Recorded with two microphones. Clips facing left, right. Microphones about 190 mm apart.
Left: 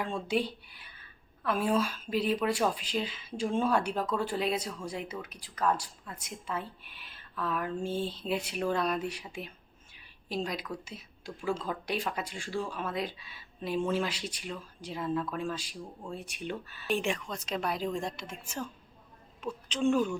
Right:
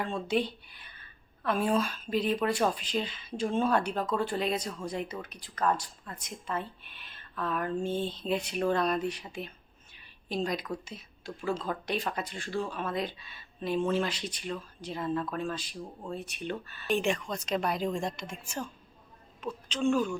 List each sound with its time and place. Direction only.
0.0 s a woman's voice: 10° left (ahead or behind)
19.6 s speech: 15° left (ahead or behind)